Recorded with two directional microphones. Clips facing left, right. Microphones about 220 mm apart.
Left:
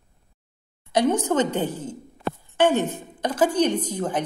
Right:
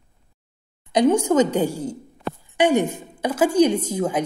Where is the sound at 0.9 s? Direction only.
15° right (ahead or behind).